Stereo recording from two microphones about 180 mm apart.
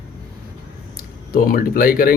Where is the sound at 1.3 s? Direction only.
55° left (ahead or behind).